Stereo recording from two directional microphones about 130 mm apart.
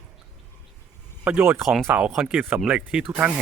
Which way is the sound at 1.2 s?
15° right (ahead or behind).